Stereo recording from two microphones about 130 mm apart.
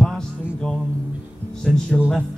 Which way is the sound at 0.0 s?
5° left (ahead or behind).